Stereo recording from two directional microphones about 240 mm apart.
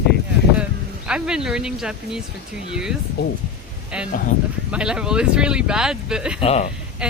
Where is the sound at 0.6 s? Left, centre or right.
Centre.